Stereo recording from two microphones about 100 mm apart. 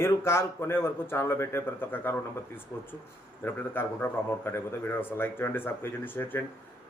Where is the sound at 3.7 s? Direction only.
25° left (ahead or behind).